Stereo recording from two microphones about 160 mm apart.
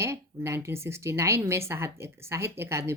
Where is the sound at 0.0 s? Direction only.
15° right (ahead or behind).